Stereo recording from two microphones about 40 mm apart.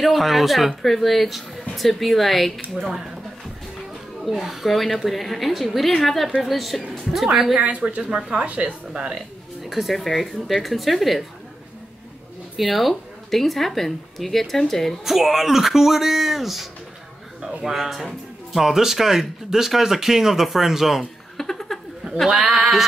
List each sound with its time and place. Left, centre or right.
0.0 s speech: centre
4.2 s speech: centre
7.5 s speech: right
9.6 s music: centre
9.9 s speech: centre
12.5 s speech: centre
15.0 s speech: centre
17.6 s speech: centre
21.0 s a sound: centre
22.3 s speech: centre